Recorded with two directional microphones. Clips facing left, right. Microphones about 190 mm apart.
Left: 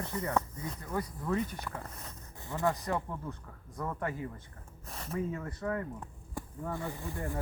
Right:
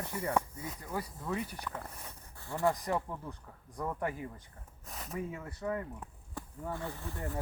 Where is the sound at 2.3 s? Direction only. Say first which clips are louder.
Even; 20° left (ahead or behind).